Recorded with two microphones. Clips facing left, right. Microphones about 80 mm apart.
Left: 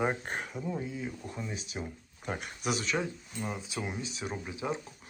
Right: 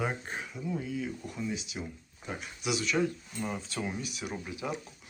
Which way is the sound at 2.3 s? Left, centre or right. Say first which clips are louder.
Left 1 dB; left.